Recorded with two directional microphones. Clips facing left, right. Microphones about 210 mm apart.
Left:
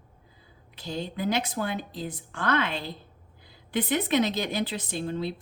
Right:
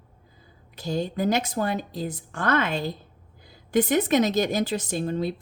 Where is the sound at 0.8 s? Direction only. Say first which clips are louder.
Right 6 dB; 45° right (ahead or behind).